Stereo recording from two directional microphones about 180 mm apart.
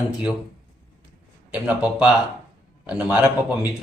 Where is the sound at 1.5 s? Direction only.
5° right (ahead or behind).